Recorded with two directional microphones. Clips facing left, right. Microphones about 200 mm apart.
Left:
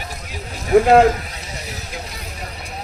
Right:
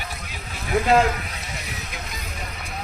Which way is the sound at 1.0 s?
35° left (ahead or behind).